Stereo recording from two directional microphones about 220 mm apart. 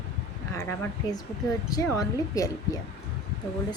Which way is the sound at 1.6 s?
15° left (ahead or behind).